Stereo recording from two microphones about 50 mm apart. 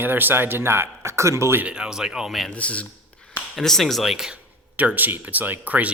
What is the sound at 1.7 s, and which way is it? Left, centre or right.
Speech, centre.